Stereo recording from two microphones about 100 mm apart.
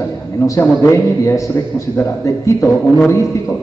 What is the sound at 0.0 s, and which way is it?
A man's voice, 25° left (ahead or behind).